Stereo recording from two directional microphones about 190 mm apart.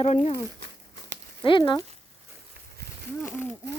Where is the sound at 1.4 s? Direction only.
25° left (ahead or behind).